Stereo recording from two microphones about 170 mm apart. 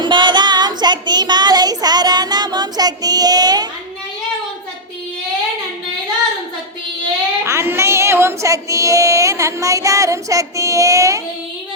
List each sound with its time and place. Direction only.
0.0 s child singing: 25° right (ahead or behind)
7.4 s speech: 15° right (ahead or behind)